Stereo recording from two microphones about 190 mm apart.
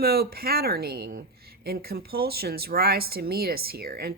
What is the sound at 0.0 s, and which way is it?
Speech, 55° right (ahead or behind).